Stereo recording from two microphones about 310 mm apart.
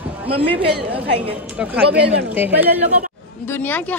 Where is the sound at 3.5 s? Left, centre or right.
Centre.